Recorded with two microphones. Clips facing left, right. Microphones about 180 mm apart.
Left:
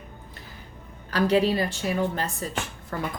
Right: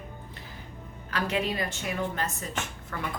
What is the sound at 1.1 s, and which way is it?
A woman's voice, 35° left (ahead or behind).